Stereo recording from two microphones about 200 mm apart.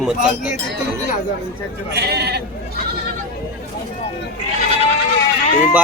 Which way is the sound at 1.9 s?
55° right (ahead or behind).